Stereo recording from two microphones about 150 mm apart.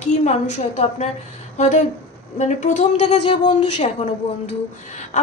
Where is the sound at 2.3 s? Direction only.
50° left (ahead or behind).